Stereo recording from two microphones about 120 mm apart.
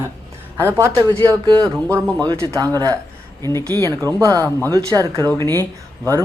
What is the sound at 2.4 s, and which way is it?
Speech, 25° right (ahead or behind).